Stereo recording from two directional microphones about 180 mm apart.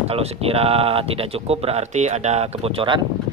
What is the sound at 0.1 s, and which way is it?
Speech, 35° right (ahead or behind).